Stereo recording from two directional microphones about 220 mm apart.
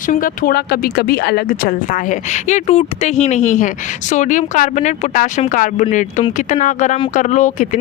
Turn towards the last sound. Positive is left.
turn(degrees=35)  # may be behind; listen again after turning